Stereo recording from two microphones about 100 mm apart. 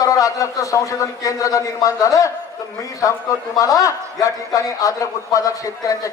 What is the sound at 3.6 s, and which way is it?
A man's voice, 35° left (ahead or behind).